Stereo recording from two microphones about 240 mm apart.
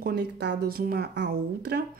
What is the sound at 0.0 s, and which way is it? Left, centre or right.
Speech, right.